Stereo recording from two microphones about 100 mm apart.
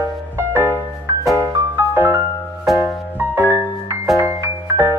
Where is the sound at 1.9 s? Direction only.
20° right (ahead or behind).